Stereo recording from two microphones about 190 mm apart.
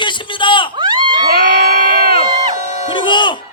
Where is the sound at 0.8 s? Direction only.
25° right (ahead or behind).